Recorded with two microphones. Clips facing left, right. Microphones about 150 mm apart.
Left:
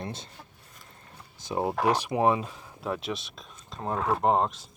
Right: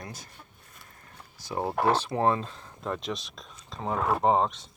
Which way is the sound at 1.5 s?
20° left (ahead or behind).